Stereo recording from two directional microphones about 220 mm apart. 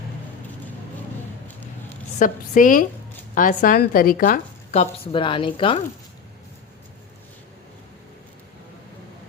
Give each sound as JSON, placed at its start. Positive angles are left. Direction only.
{"t": 2.1, "sound": "a woman's voice", "side_deg": 35}